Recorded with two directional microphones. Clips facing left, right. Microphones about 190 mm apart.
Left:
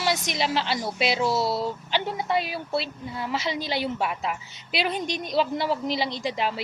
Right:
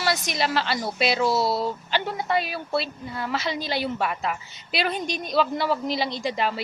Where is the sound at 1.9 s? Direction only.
15° left (ahead or behind).